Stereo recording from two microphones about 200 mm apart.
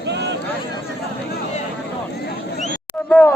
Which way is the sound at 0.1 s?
60° right (ahead or behind).